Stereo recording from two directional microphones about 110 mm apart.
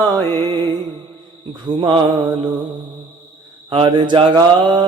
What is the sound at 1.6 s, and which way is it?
Mantra, 45° right (ahead or behind).